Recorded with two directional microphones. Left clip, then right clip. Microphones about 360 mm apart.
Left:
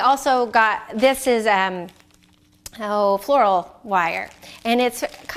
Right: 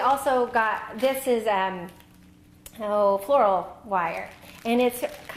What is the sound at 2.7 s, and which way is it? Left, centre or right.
Speech, left.